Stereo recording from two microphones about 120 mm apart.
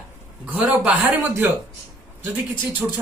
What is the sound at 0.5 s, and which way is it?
Speech, 5° right (ahead or behind).